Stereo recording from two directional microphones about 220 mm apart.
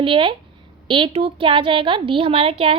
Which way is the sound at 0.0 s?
25° right (ahead or behind).